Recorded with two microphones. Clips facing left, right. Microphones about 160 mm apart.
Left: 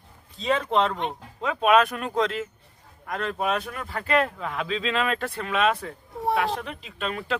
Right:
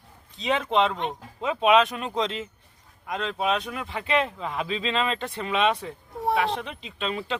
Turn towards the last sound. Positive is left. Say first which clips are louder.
# even
turn(degrees=0)  # may be behind; listen again after turning